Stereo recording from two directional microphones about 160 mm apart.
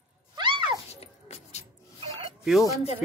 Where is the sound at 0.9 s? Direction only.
40° left (ahead or behind).